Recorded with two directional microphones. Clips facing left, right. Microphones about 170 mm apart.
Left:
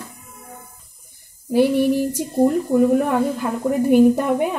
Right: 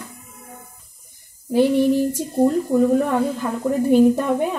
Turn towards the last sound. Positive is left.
turn(degrees=15)  # may be behind; listen again after turning